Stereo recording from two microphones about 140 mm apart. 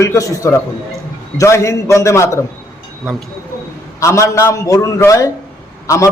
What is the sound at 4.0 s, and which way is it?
A man's voice, 20° left (ahead or behind).